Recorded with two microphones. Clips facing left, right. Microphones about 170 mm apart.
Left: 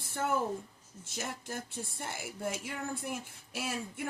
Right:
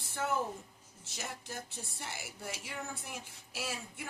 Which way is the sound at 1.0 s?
50° left (ahead or behind).